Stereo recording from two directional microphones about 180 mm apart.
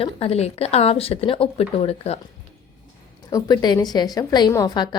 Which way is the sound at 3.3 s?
20° left (ahead or behind).